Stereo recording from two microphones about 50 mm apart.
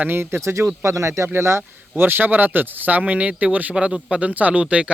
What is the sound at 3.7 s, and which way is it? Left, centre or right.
Speech, centre.